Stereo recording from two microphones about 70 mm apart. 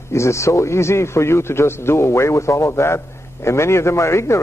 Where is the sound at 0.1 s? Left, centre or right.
Left.